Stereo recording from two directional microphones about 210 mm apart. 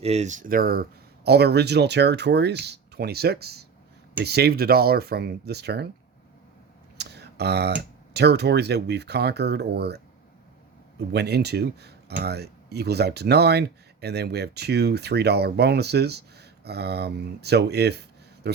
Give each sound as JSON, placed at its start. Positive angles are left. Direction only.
{"t": 0.0, "sound": "speech", "side_deg": -30}
{"t": 6.9, "sound": "speech", "side_deg": -50}